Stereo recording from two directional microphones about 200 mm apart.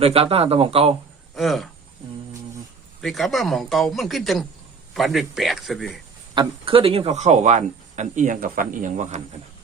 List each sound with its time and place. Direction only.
0.0 s speech: 30° right (ahead or behind)
1.4 s speech: centre (ahead or behind)
3.0 s speech: centre (ahead or behind)
6.3 s speech: 25° right (ahead or behind)